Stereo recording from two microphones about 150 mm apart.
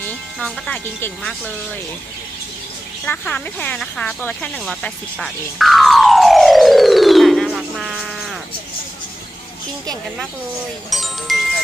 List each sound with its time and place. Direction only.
0.0 s speech: 10° left (ahead or behind)
3.1 s speech: 10° left (ahead or behind)
10.8 s music: centre (ahead or behind)